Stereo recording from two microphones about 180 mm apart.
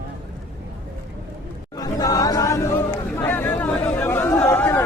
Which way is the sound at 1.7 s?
20° left (ahead or behind).